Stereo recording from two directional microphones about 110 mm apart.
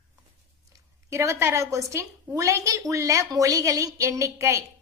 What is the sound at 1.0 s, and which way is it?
A woman's voice, 25° right (ahead or behind).